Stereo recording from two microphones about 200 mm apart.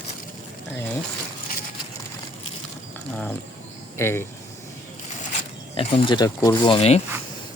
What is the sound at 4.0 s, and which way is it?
Speech, 10° left (ahead or behind).